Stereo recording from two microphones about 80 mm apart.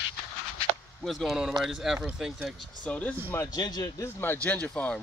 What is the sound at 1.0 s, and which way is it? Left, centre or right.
A man's voice, centre.